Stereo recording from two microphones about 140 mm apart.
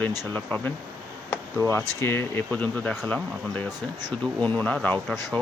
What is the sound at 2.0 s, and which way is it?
Speech, 15° left (ahead or behind).